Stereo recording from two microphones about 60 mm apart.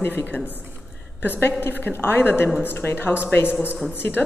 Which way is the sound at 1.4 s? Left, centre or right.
Left.